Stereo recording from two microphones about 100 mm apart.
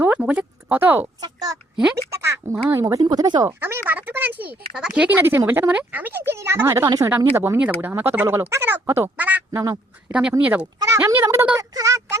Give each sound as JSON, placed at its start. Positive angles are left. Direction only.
{"t": 0.0, "sound": "a sound", "side_deg": -15}
{"t": 1.0, "sound": "speech", "side_deg": -40}
{"t": 1.7, "sound": "speech", "side_deg": -10}
{"t": 2.0, "sound": "a sound", "side_deg": -25}
{"t": 3.0, "sound": "speech", "side_deg": -45}
{"t": 3.4, "sound": "speech", "side_deg": -25}
{"t": 6.8, "sound": "speech", "side_deg": -40}
{"t": 7.3, "sound": "speech", "side_deg": -30}
{"t": 9.5, "sound": "speech", "side_deg": -30}
{"t": 10.1, "sound": "speech", "side_deg": -10}
{"t": 10.8, "sound": "speech", "side_deg": -30}